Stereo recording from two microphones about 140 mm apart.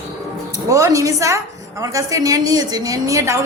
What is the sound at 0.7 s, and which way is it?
A woman's voice, 25° right (ahead or behind).